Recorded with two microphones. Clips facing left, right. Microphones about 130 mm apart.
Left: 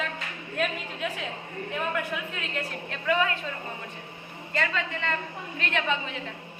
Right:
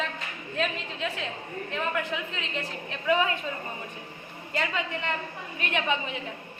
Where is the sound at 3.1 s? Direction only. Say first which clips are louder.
Right 1 dB; 15° right (ahead or behind).